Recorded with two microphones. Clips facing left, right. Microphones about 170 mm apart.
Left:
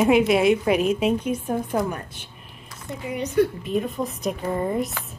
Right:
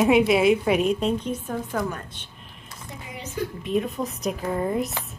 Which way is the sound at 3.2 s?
65° left (ahead or behind).